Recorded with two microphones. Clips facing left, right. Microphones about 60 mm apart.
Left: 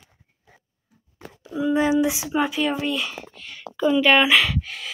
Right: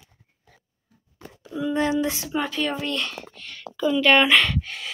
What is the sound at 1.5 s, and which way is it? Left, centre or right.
Speech, centre.